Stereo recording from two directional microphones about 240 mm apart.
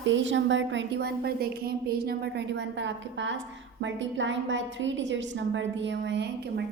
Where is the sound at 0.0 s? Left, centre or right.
Right.